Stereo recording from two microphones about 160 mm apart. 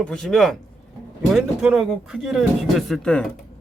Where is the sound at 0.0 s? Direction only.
5° left (ahead or behind).